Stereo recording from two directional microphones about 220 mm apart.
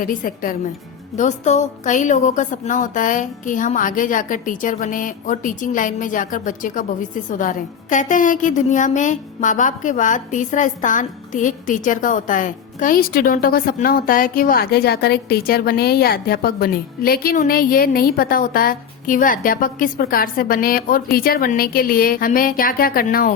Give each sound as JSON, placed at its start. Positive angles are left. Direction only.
{"t": 0.0, "sound": "a woman's voice", "side_deg": 40}